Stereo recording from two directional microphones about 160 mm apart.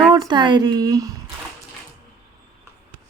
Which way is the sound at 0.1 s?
25° right (ahead or behind).